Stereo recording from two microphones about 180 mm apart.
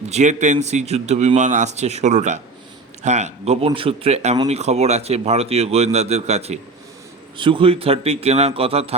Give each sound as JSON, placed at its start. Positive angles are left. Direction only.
{"t": 0.1, "sound": "speech", "side_deg": -40}